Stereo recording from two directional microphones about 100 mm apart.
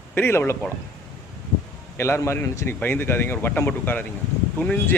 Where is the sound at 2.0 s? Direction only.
25° left (ahead or behind).